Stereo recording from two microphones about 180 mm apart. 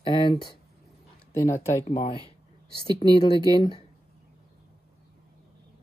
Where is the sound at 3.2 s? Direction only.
25° left (ahead or behind).